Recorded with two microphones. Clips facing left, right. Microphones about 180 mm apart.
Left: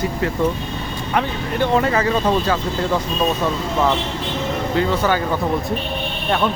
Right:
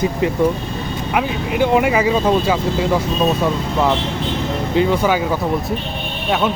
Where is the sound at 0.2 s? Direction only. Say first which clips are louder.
Right 3 dB; 15° right (ahead or behind).